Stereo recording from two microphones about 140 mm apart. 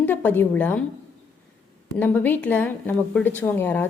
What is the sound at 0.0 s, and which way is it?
Speech, 15° left (ahead or behind).